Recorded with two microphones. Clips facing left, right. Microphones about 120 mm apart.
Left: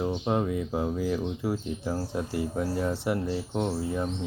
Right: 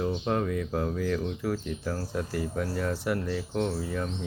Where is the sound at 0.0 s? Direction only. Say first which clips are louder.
Left 1 dB; 20° left (ahead or behind).